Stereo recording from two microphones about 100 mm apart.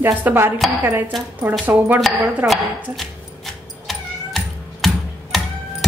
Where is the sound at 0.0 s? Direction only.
20° right (ahead or behind).